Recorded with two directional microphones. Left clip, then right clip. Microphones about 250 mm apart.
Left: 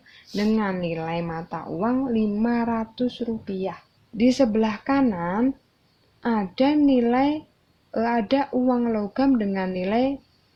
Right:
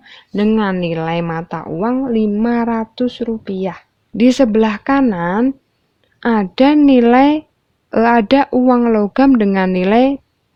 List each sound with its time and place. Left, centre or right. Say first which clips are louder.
0.3 s a woman's voice: right 9 dB; right